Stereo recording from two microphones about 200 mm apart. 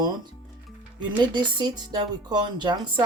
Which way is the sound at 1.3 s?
20° right (ahead or behind).